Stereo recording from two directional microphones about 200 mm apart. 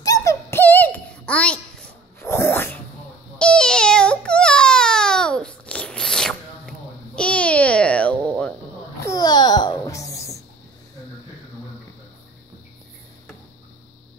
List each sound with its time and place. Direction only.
0.0 s a sound: 15° left (ahead or behind)
7.2 s babbling: 5° left (ahead or behind)
9.0 s babbling: 20° left (ahead or behind)